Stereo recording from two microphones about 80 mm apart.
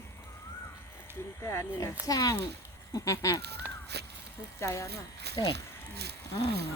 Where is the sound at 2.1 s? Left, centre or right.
Left.